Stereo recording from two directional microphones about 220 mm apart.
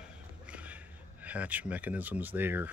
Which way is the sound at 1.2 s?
5° right (ahead or behind).